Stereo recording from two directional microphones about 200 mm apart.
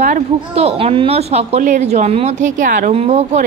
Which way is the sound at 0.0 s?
35° right (ahead or behind).